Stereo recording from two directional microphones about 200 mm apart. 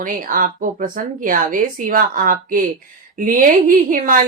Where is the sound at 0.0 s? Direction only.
40° right (ahead or behind).